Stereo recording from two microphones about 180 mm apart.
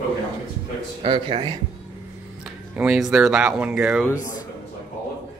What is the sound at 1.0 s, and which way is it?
Speech, 30° right (ahead or behind).